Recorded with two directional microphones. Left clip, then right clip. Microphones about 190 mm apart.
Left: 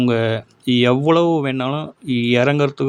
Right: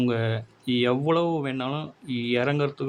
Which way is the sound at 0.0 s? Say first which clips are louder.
Left 8 dB; 35° left (ahead or behind).